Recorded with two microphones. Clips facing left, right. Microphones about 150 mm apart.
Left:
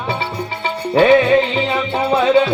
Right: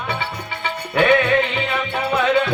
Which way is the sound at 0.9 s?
30° left (ahead or behind).